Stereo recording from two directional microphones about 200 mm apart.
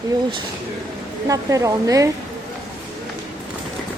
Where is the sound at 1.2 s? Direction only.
15° right (ahead or behind).